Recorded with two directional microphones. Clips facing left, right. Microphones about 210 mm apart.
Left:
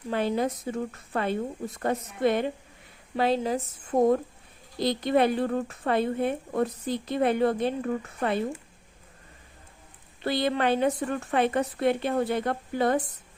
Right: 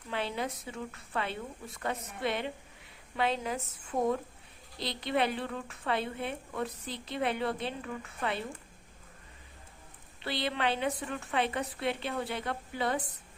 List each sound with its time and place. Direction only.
0.1 s a woman's voice: 45° left (ahead or behind)
10.2 s a woman's voice: 45° left (ahead or behind)